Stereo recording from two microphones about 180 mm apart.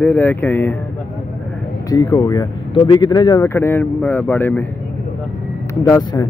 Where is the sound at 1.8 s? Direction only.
15° left (ahead or behind).